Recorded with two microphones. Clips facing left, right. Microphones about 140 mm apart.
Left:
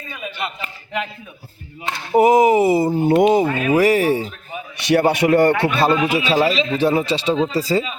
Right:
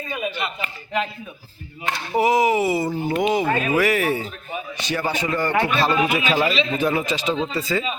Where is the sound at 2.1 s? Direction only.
45° left (ahead or behind).